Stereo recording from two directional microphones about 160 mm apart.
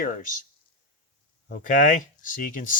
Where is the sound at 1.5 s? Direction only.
60° left (ahead or behind).